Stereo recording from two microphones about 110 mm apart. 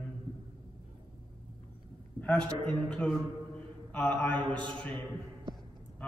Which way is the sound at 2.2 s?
10° left (ahead or behind).